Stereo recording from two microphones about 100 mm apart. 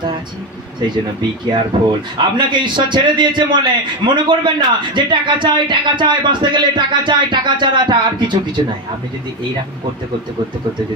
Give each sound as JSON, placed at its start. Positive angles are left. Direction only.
{"t": 1.7, "sound": "a man's voice", "side_deg": -55}